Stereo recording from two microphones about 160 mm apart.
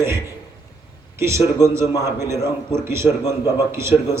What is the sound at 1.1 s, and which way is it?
Speech, 15° right (ahead or behind).